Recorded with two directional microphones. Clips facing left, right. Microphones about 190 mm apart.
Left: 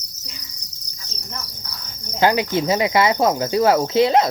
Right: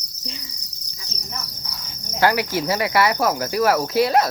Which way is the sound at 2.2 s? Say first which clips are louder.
Left 2 dB; 20° left (ahead or behind).